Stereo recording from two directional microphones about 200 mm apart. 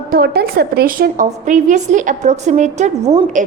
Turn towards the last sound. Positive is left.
turn(degrees=-35)  # may be behind; listen again after turning